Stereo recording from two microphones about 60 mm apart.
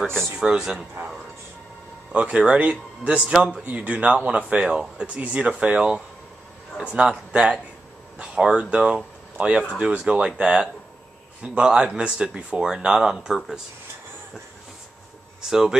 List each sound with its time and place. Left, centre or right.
0.0 s speech: centre
0.3 s speech: centre
2.1 s speech: centre
15.4 s speech: centre